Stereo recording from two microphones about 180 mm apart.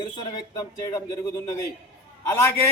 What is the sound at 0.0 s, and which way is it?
Speech, 25° left (ahead or behind).